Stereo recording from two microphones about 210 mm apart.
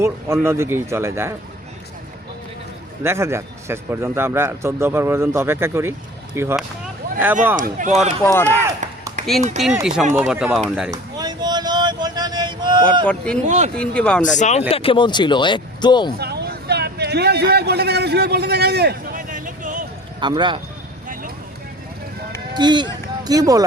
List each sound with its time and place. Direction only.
0.0 s speech: 10° right (ahead or behind)
3.0 s speech: 10° right (ahead or behind)
7.5 s speech: 40° right (ahead or behind)
8.2 s speech: 10° left (ahead or behind)
8.4 s chop: 15° right (ahead or behind)
9.8 s speech: centre (ahead or behind)
10.9 s a sound: 20° right (ahead or behind)
13.1 s speech: 5° left (ahead or behind)
14.2 s speech: 35° left (ahead or behind)
16.1 s a sound: 50° right (ahead or behind)
20.1 s speech: 20° right (ahead or behind)
21.1 s vehicle: 40° right (ahead or behind)
22.5 s speech: 20° right (ahead or behind)